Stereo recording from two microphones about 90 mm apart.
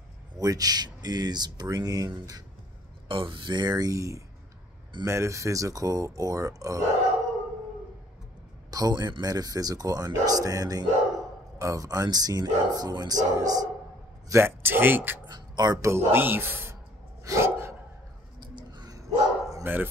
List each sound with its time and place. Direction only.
0.4 s speech: 40° right (ahead or behind)
3.1 s speech: 70° right (ahead or behind); by 6.8 s 40° right (ahead or behind)
8.6 s a man's voice: 45° right (ahead or behind)
14.3 s speech: 25° right (ahead or behind)
15.2 s a sound: 50° right (ahead or behind)
15.8 s speech: 25° right (ahead or behind)
17.2 s dog: 35° right (ahead or behind)
18.4 s dog: 55° right (ahead or behind); by 19.6 s 40° right (ahead or behind)
19.6 s speech: 25° right (ahead or behind)